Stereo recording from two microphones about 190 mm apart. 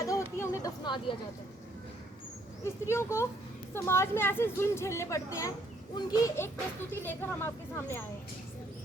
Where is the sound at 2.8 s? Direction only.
15° left (ahead or behind).